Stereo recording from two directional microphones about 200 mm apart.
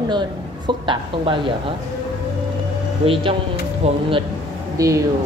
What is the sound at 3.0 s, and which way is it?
Speech, 30° right (ahead or behind).